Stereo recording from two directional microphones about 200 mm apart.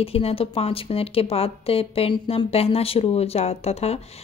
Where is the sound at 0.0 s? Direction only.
30° left (ahead or behind).